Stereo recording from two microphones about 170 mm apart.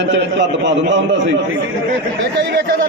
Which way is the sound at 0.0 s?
90° right.